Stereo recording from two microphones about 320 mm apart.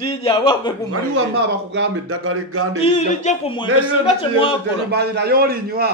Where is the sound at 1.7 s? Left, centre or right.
Right.